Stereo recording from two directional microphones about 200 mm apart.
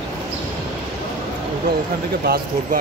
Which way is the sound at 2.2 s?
50° right (ahead or behind).